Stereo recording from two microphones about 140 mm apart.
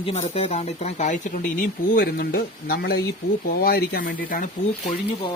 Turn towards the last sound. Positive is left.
turn(degrees=35)  # may be behind; listen again after turning